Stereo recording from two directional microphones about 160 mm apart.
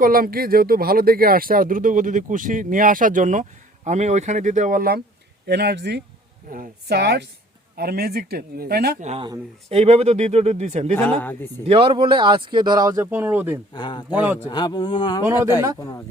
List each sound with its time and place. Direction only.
0.0 s speech: 65° right (ahead or behind)
5.5 s a woman's voice: 90° right
6.5 s a woman's voice: 75° right (ahead or behind)
7.8 s speech: 75° right (ahead or behind)
9.0 s speech: 45° right (ahead or behind)
10.9 s speech: 10° left (ahead or behind)
11.6 s speech: 35° right (ahead or behind); by 13.6 s 10° right (ahead or behind)
13.7 s speech: 30° left (ahead or behind)
14.1 s a man's voice: 10° right (ahead or behind)
14.4 s speech: 30° left (ahead or behind)